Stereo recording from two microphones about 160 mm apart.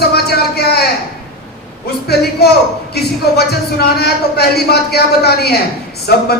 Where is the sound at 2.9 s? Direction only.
90° left.